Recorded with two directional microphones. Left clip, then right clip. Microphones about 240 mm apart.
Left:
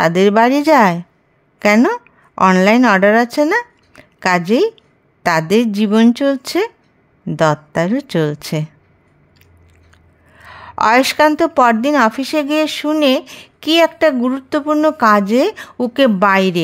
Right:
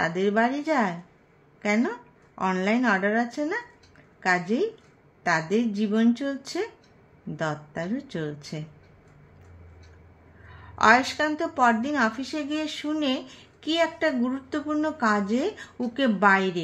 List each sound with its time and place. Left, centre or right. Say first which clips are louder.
0.0 s a woman's voice: left 12 dB; left
10.4 s a woman's voice: left 6 dB; left